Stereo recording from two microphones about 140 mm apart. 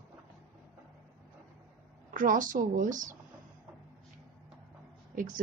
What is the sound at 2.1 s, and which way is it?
A woman's voice, 70° right (ahead or behind).